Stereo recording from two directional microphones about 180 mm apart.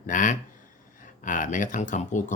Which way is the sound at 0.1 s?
45° left (ahead or behind).